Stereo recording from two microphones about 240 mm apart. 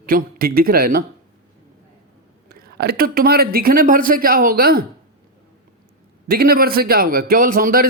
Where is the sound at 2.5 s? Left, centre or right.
Right.